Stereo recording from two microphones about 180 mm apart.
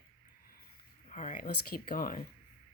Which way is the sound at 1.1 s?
40° left (ahead or behind).